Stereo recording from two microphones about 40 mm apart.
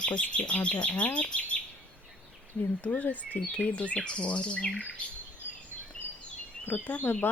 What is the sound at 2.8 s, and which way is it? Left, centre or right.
Speech, left.